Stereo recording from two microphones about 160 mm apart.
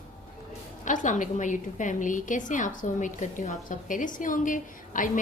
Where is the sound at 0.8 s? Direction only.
50° left (ahead or behind).